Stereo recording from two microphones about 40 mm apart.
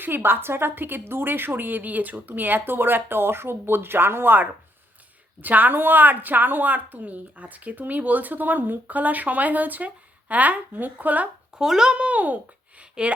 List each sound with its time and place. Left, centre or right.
0.0 s a woman's voice: right
5.4 s a woman's voice: right
11.5 s a child's voice: centre
11.9 s a child's voice: right
12.8 s a sound: right